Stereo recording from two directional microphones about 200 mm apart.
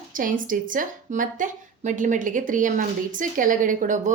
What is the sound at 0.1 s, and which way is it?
A woman's voice, 45° right (ahead or behind).